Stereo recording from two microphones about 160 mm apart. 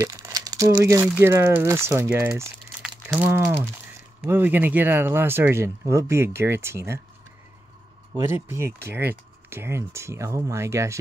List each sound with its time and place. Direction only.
0.0 s speech: 20° right (ahead or behind)
2.8 s crumpling: 10° right (ahead or behind)
4.2 s speech: 10° right (ahead or behind)
8.2 s speech: 15° right (ahead or behind)